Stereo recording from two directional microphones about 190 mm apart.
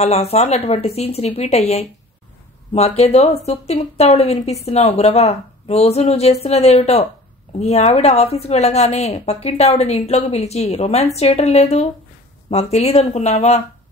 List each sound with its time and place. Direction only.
0.0 s a woman's voice: 35° left (ahead or behind)